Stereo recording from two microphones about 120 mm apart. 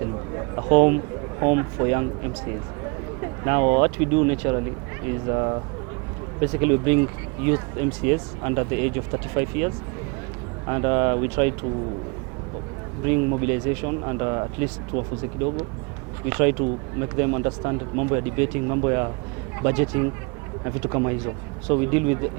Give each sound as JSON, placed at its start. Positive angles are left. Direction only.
{"t": 0.3, "sound": "a sound", "side_deg": -25}
{"t": 1.4, "sound": "speech", "side_deg": -25}
{"t": 3.4, "sound": "speech", "side_deg": -25}
{"t": 13.4, "sound": "speech", "side_deg": -20}
{"t": 16.3, "sound": "speech", "side_deg": -20}